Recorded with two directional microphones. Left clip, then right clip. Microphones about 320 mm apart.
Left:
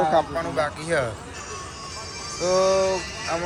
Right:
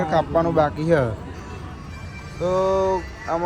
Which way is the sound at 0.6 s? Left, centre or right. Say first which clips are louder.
Right 2 dB; centre.